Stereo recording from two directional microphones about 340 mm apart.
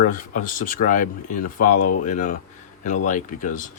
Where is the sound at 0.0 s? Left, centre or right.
Left.